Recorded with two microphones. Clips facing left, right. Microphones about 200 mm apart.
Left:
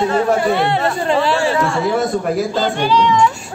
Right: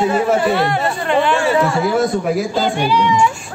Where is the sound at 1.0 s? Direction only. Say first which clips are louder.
Right 2 dB; 30° left (ahead or behind).